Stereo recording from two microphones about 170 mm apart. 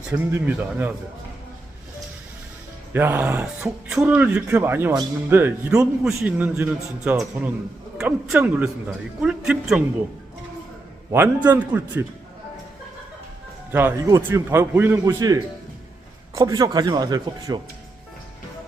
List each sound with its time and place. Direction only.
0.1 s a man's voice: 10° right (ahead or behind)
2.9 s a man's voice: 15° right (ahead or behind)
11.4 s a man's voice: 10° right (ahead or behind)
13.7 s a man's voice: 15° right (ahead or behind)